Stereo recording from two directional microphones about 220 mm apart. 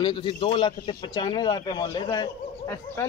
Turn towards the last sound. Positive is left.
turn(degrees=15)  # may be behind; listen again after turning